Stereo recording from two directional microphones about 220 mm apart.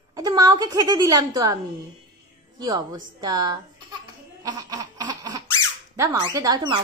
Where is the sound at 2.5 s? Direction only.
20° right (ahead or behind).